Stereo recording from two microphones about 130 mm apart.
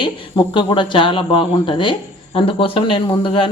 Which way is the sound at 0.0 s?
40° left (ahead or behind).